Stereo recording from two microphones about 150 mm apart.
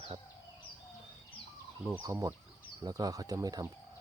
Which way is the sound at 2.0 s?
20° right (ahead or behind).